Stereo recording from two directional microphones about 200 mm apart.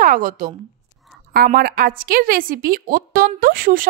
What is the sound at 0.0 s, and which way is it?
A woman's voice, 40° right (ahead or behind).